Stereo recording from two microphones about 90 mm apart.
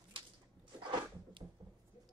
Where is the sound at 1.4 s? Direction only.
10° right (ahead or behind).